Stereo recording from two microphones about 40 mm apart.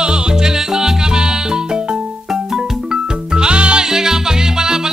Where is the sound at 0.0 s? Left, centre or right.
Centre.